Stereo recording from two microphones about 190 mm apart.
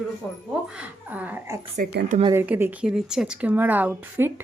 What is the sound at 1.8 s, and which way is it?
Speech, 45° right (ahead or behind).